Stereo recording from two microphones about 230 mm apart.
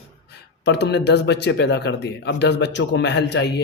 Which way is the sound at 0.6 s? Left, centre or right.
Left.